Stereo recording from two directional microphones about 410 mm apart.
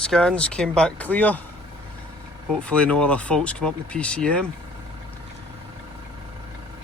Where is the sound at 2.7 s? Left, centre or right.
Centre.